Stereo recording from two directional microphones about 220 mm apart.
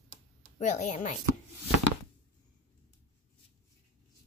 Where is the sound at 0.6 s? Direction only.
35° left (ahead or behind).